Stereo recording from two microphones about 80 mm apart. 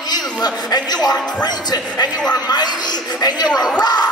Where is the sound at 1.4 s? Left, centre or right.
Left.